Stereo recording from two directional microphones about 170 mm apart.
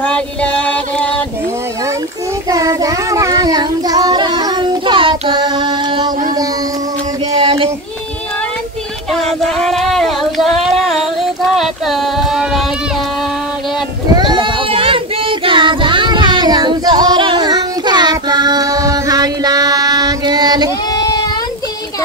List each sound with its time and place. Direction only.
0.0 s a sound: 5° left (ahead or behind)
2.5 s child singing: 20° right (ahead or behind)
7.3 s child singing: 35° right (ahead or behind)
9.1 s child singing: centre (ahead or behind)
11.5 s a sound: centre (ahead or behind)
14.1 s child singing: 25° right (ahead or behind)
20.9 s sheep: 25° left (ahead or behind)